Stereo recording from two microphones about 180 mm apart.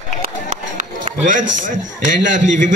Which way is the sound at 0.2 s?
50° right (ahead or behind).